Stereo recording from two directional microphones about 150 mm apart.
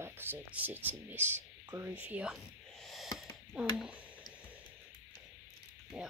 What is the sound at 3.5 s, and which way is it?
Speech, 10° right (ahead or behind).